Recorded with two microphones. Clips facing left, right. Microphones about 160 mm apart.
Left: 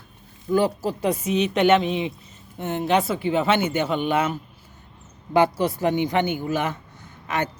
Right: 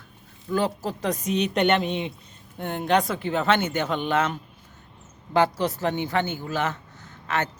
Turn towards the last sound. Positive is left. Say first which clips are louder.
# left 1 dB
turn(degrees=10)  # may be behind; listen again after turning